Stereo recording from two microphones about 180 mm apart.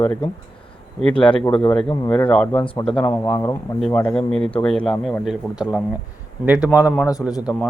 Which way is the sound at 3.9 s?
5° left (ahead or behind).